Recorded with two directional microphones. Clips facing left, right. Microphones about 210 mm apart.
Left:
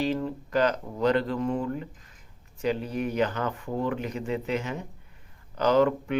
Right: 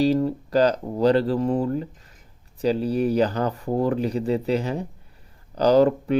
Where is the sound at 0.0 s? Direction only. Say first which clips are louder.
Right 8 dB; 35° right (ahead or behind).